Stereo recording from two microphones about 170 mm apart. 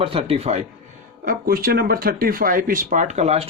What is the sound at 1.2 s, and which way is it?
Speech, 60° right (ahead or behind).